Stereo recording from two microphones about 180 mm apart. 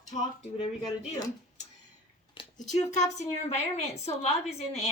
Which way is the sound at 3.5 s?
35° left (ahead or behind).